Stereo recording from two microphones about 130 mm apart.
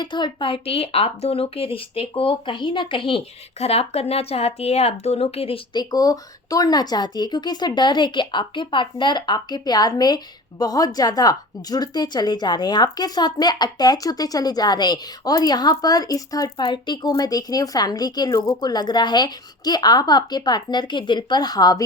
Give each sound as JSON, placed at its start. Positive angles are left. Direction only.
{"t": 0.0, "sound": "speech", "side_deg": 35}
{"t": 5.7, "sound": "a woman's voice", "side_deg": 30}